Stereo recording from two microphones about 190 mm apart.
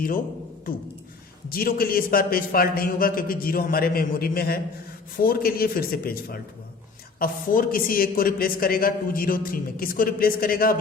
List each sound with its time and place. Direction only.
1.5 s a man's voice: 50° left (ahead or behind)